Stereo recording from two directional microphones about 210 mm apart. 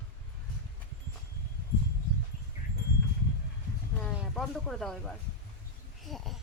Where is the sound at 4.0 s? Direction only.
Centre (ahead or behind).